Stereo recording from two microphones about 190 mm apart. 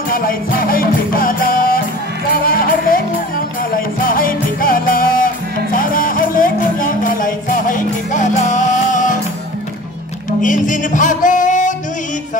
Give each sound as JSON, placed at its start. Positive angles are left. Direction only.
{"t": 0.1, "sound": "music", "side_deg": 50}
{"t": 10.4, "sound": "music", "side_deg": 40}